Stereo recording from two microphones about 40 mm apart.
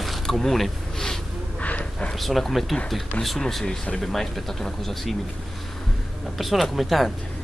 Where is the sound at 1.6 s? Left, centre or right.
Left.